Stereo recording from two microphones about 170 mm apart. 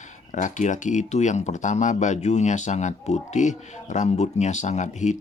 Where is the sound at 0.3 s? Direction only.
45° left (ahead or behind).